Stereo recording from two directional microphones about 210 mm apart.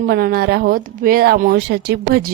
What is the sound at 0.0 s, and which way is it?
Speech, 45° right (ahead or behind).